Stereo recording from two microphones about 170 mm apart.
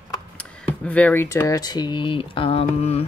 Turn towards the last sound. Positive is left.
turn(degrees=35)  # may be behind; listen again after turning